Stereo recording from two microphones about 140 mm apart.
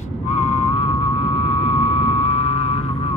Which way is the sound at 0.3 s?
50° left (ahead or behind).